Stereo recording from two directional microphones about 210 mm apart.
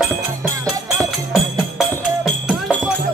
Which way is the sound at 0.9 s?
Centre (ahead or behind).